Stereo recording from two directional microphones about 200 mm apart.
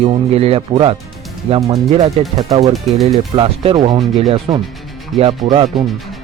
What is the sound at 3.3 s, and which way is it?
Speech, 30° right (ahead or behind).